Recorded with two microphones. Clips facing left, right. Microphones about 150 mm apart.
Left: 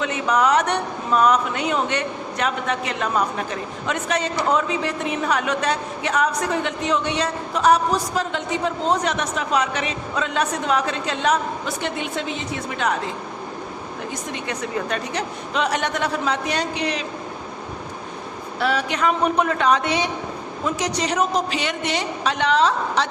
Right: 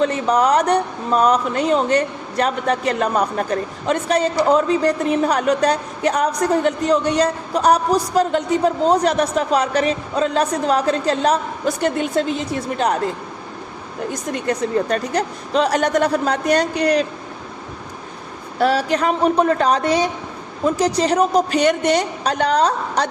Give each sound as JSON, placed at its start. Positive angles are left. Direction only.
{"t": 0.0, "sound": "speech", "side_deg": -35}
{"t": 14.3, "sound": "speech", "side_deg": -40}
{"t": 18.6, "sound": "speech", "side_deg": -35}